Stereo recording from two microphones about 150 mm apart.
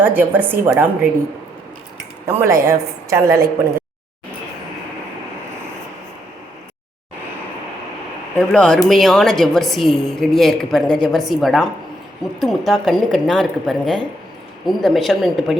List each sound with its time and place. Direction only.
0.0 s a woman's voice: 15° right (ahead or behind)
2.2 s a woman's voice: 20° right (ahead or behind)
8.4 s a woman's voice: 5° left (ahead or behind)